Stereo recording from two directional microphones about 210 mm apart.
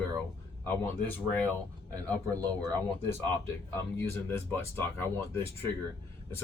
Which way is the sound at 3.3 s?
10° left (ahead or behind).